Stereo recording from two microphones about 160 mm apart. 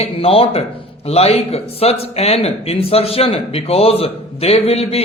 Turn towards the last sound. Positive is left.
turn(degrees=40)  # may be behind; listen again after turning